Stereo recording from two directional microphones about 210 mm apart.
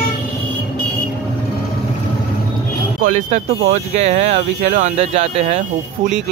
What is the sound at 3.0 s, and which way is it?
Speech, 35° right (ahead or behind).